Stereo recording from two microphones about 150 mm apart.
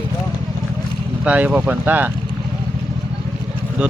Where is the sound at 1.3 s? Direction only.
10° right (ahead or behind).